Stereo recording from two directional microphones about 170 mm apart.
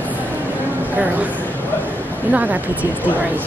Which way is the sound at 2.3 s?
10° right (ahead or behind).